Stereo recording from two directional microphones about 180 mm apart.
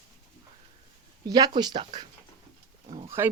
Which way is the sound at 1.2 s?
25° right (ahead or behind).